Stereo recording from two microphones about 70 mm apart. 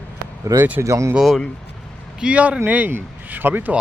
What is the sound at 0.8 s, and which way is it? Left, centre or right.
Speech, right.